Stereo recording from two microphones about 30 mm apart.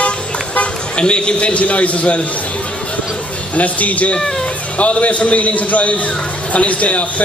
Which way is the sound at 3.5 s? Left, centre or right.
Left.